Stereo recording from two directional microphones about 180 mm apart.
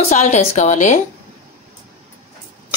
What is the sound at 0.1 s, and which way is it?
Speech, 40° left (ahead or behind).